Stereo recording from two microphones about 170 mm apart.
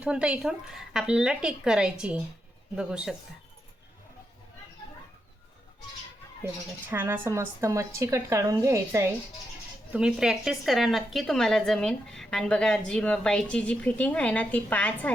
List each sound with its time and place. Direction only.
0.0 s a woman's voice: 5° right (ahead or behind)
6.9 s a woman's voice: 10° right (ahead or behind)
9.9 s a woman's voice: 5° right (ahead or behind)